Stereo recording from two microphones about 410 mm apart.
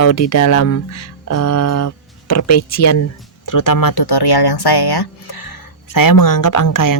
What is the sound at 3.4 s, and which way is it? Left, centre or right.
Speech, left.